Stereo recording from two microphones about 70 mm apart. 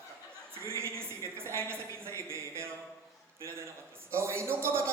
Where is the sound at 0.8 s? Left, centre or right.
Right.